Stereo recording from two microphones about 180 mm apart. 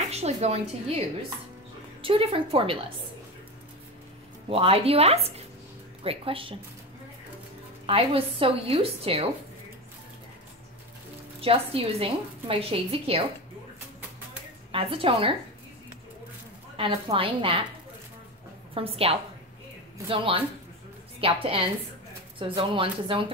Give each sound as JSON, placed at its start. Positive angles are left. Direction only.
{"t": 0.1, "sound": "a woman's voice", "side_deg": -35}
{"t": 4.5, "sound": "a woman's voice", "side_deg": -35}
{"t": 7.8, "sound": "a woman's voice", "side_deg": -30}
{"t": 11.4, "sound": "a woman's voice", "side_deg": -30}
{"t": 14.7, "sound": "a woman's voice", "side_deg": -30}
{"t": 16.7, "sound": "a woman's voice", "side_deg": -30}
{"t": 18.8, "sound": "a woman's voice", "side_deg": -30}